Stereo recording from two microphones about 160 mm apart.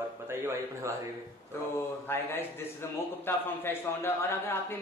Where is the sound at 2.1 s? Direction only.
15° left (ahead or behind).